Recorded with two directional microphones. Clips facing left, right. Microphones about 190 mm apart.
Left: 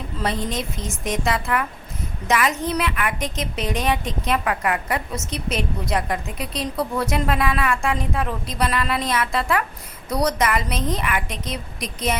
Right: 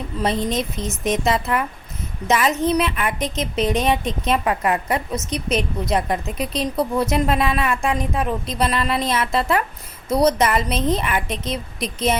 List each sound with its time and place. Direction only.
0.2 s a woman's voice: 20° right (ahead or behind)